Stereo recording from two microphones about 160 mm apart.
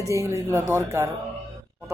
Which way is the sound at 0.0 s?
20° right (ahead or behind).